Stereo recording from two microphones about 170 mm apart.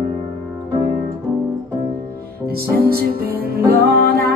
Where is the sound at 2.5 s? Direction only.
65° right (ahead or behind).